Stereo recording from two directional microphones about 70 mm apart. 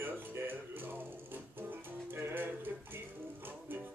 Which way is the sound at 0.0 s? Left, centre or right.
Right.